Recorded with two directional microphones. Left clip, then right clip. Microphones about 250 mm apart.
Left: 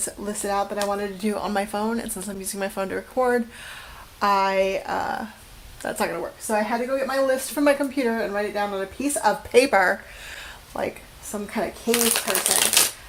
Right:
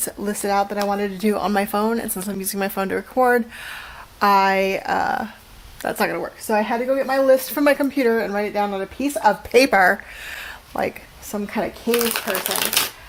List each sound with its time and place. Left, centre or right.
0.0 s speech: right
12.0 s speech: right